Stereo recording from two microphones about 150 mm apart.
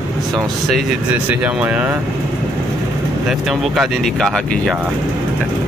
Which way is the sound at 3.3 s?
Centre (ahead or behind).